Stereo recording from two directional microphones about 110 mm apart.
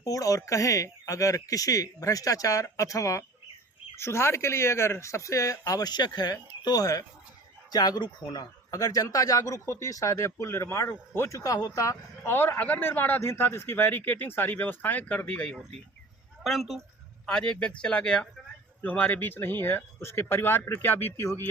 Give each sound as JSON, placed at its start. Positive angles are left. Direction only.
{"t": 0.0, "sound": "a man's voice", "side_deg": 30}